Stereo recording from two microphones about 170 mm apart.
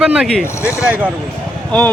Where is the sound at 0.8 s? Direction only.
10° right (ahead or behind).